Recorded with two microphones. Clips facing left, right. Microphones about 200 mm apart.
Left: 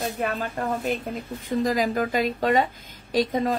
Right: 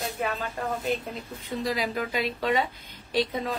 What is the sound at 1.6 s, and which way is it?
A woman's voice, 45° left (ahead or behind).